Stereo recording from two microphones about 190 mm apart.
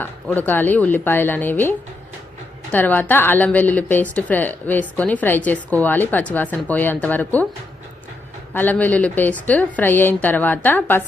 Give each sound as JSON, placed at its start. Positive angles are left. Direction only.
{"t": 0.0, "sound": "a woman's voice", "side_deg": 10}
{"t": 2.7, "sound": "a woman's voice", "side_deg": 10}
{"t": 8.5, "sound": "a woman's voice", "side_deg": 10}